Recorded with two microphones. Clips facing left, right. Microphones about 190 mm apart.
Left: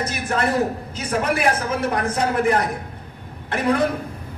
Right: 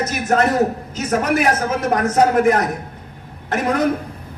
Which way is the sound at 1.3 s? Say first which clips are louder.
Right 3 dB; 30° left (ahead or behind).